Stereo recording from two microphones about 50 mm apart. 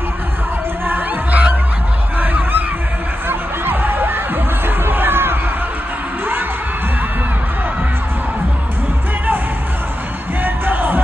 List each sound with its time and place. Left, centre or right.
0.8 s music: right
2.1 s a sound: right
3.3 s crowd: right
4.6 s music: right
10.4 s music: right